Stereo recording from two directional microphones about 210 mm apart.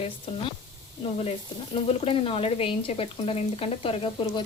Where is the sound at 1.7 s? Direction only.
25° left (ahead or behind).